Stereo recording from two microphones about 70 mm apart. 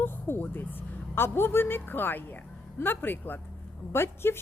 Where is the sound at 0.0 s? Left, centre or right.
Left.